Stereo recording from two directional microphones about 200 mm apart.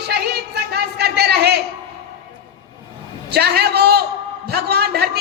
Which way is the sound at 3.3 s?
55° right (ahead or behind).